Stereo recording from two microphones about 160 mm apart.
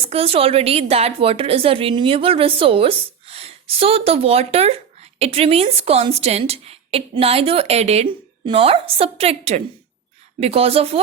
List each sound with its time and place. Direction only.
0.0 s a woman's voice: 40° right (ahead or behind)